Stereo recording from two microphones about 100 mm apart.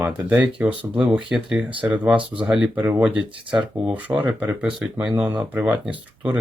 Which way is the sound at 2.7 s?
25° right (ahead or behind).